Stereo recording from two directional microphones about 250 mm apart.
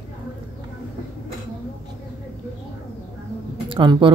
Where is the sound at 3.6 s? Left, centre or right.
Centre.